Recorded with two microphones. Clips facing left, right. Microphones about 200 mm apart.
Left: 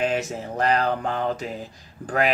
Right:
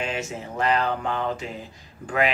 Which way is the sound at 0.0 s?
35° left (ahead or behind).